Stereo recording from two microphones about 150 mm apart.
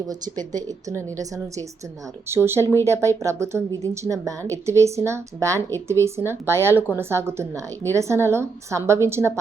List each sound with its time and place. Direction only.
0.1 s a woman's voice: 25° right (ahead or behind)